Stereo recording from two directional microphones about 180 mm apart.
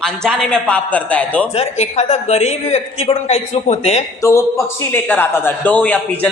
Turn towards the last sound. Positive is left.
turn(degrees=10)  # may be behind; listen again after turning